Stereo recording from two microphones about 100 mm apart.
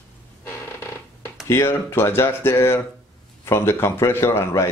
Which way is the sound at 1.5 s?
25° left (ahead or behind).